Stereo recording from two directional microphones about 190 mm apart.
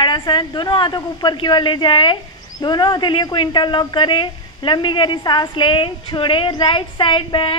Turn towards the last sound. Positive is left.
turn(degrees=25)  # may be behind; listen again after turning